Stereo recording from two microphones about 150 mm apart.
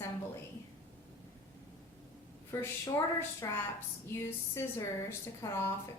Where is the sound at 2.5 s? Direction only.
20° left (ahead or behind).